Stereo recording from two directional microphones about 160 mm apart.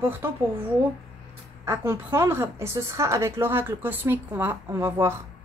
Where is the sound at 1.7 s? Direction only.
15° right (ahead or behind).